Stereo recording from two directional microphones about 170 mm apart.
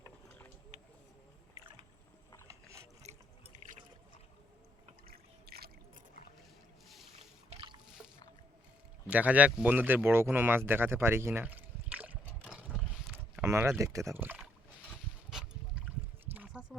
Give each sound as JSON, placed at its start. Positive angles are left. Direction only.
{"t": 5.0, "sound": "drip", "side_deg": -65}
{"t": 7.5, "sound": "boat", "side_deg": -30}
{"t": 9.0, "sound": "speech", "side_deg": -10}
{"t": 13.4, "sound": "speech", "side_deg": -15}
{"t": 15.3, "sound": "a sound", "side_deg": -5}